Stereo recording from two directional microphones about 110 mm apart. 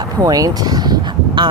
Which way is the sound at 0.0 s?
35° right (ahead or behind).